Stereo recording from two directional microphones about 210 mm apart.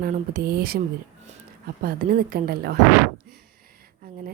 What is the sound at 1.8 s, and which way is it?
Speech, 45° right (ahead or behind).